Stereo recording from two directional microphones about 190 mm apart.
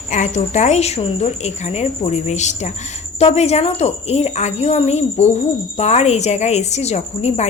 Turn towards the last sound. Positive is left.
turn(degrees=35)  # may be behind; listen again after turning